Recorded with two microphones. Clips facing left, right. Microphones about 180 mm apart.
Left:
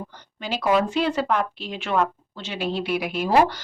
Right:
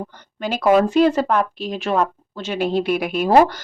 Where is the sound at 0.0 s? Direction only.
50° right (ahead or behind).